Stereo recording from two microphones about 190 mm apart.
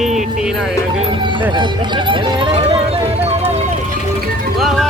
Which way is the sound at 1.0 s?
25° right (ahead or behind).